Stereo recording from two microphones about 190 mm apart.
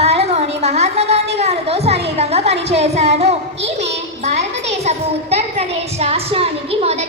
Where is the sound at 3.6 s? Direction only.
65° right (ahead or behind).